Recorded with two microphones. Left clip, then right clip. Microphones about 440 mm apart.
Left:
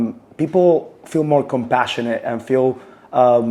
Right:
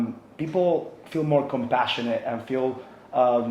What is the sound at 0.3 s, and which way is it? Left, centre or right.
Speech, left.